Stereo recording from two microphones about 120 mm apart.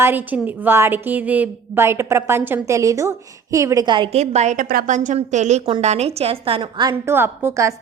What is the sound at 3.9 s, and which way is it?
Speech, 40° right (ahead or behind).